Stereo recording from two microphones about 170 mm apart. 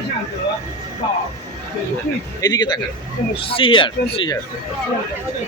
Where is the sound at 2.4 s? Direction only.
25° left (ahead or behind).